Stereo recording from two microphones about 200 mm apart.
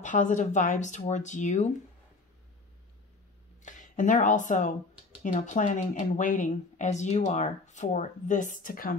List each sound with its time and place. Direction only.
0.0 s speech: 40° left (ahead or behind)
3.6 s speech: 40° left (ahead or behind)